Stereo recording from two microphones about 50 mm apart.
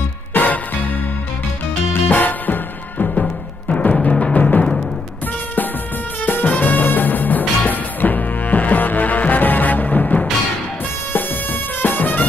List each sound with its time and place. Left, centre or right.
0.3 s music: left
2.0 s music: left
3.2 s music: centre
3.9 s timpani: centre
6.2 s music: left
11.8 s music: left